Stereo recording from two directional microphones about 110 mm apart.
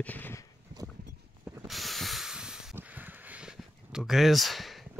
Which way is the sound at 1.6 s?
Centre (ahead or behind).